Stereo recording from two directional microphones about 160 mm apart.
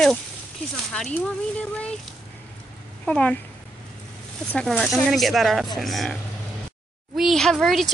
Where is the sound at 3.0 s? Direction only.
5° left (ahead or behind).